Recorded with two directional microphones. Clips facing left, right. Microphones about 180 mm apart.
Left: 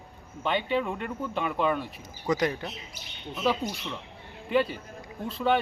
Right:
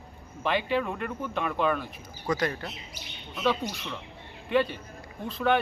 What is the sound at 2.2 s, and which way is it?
Speech, 15° left (ahead or behind).